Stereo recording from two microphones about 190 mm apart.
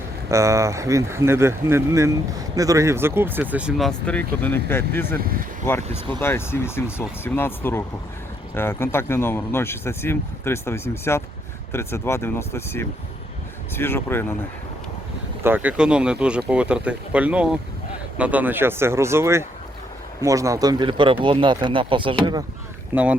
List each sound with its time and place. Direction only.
0.3 s speech: 15° right (ahead or behind); by 14.3 s 10° left (ahead or behind)
15.4 s speech: 10° right (ahead or behind)
22.9 s speech: 10° right (ahead or behind)